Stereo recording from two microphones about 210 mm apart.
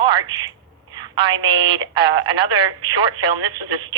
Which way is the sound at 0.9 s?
25° right (ahead or behind).